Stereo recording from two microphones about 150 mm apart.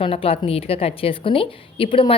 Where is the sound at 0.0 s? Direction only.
40° left (ahead or behind).